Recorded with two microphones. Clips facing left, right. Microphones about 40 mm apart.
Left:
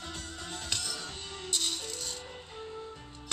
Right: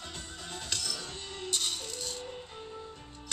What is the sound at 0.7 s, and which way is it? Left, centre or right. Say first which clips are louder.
Music: even; centre.